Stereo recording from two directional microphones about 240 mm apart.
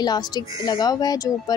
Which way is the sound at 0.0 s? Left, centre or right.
Centre.